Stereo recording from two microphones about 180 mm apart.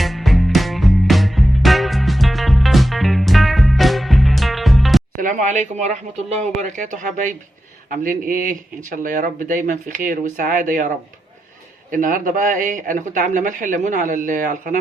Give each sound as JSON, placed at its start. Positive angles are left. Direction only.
{"t": 0.0, "sound": "music", "side_deg": 0}
{"t": 5.1, "sound": "speech", "side_deg": -45}